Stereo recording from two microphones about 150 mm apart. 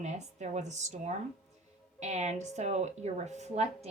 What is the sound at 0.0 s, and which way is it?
Speech, 50° right (ahead or behind).